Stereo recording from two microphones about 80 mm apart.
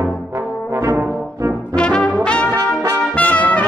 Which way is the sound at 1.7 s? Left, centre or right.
Centre.